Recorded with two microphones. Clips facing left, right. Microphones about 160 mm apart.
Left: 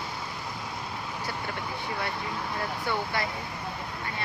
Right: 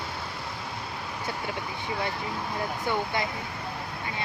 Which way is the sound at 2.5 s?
15° right (ahead or behind).